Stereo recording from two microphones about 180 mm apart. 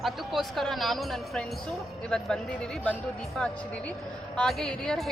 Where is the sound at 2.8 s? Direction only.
5° left (ahead or behind).